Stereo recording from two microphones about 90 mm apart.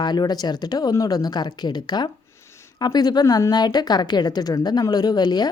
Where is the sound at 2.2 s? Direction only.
30° left (ahead or behind).